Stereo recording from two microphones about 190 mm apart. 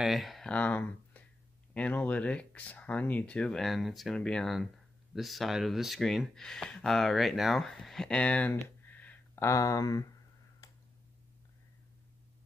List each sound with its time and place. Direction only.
0.0 s speech: centre (ahead or behind); by 10.0 s 20° left (ahead or behind)
10.6 s tick: 15° left (ahead or behind)